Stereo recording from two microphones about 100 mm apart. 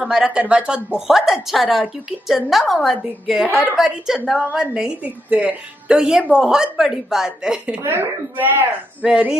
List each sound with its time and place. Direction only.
0.0 s a woman's voice: 5° right (ahead or behind)
7.8 s speech: 25° right (ahead or behind)
9.0 s a woman's voice: 10° right (ahead or behind)